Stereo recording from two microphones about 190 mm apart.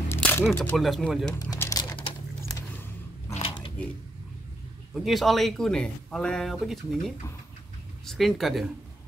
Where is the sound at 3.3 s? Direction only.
30° left (ahead or behind).